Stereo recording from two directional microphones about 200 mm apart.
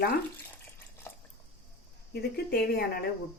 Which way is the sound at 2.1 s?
50° left (ahead or behind).